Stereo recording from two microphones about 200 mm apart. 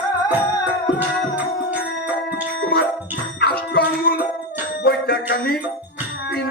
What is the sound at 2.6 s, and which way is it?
Music, 50° left (ahead or behind).